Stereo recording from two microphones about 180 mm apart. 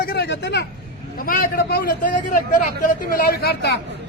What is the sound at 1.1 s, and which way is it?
A man's voice, 50° left (ahead or behind).